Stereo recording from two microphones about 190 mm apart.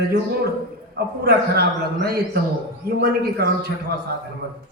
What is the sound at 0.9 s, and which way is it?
A man's voice, 55° right (ahead or behind).